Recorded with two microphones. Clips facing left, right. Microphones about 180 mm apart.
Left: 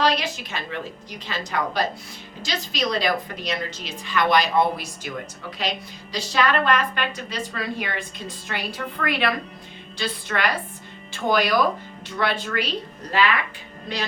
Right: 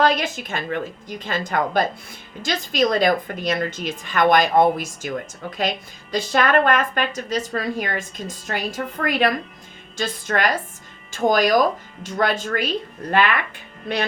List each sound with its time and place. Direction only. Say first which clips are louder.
0.0 s a woman's voice: right 3 dB; 50° right (ahead or behind)